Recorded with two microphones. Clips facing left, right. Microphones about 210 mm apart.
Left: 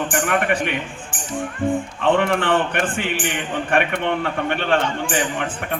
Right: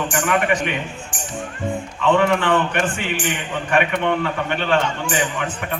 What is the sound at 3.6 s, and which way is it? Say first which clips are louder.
Speech: right 2 dB; 55° left (ahead or behind).